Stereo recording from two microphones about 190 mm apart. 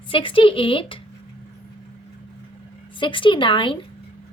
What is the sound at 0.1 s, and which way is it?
Speech, 25° left (ahead or behind).